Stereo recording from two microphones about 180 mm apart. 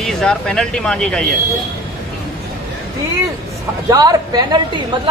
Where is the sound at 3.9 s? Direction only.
20° right (ahead or behind).